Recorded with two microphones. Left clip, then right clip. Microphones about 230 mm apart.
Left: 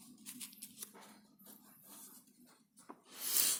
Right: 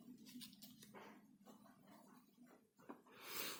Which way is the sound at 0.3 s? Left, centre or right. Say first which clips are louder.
Left 6 dB; left.